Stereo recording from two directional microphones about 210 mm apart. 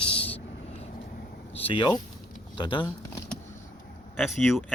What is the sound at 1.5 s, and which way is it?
Speech, 25° left (ahead or behind).